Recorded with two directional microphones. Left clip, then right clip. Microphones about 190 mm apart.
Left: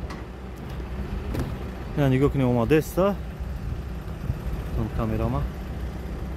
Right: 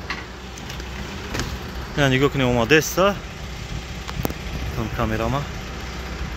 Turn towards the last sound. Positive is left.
turn(degrees=-5)  # may be behind; listen again after turning